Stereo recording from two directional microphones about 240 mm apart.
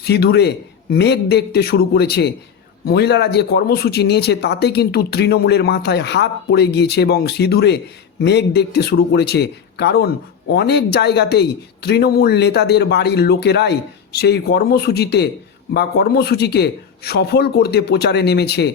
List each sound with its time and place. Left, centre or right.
0.0 s speech: left